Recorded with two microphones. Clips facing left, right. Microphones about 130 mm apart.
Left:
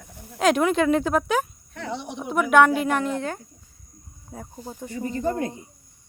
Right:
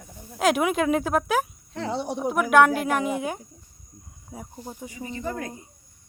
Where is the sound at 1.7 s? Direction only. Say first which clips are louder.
Right 4 dB; 30° right (ahead or behind).